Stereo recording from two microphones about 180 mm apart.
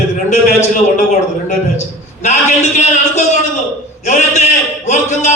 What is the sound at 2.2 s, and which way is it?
A man's voice, 40° left (ahead or behind).